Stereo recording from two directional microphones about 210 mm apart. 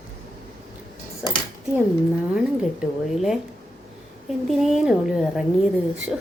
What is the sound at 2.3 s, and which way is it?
A woman's voice, 5° right (ahead or behind).